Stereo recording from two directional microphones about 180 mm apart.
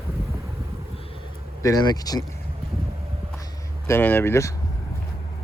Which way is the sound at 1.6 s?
20° left (ahead or behind).